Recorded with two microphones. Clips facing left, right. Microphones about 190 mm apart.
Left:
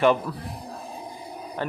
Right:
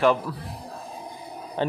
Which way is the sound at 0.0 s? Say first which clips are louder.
Left 1 dB; centre (ahead or behind).